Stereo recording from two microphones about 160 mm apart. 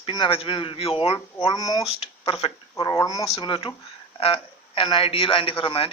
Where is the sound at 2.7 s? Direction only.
25° left (ahead or behind).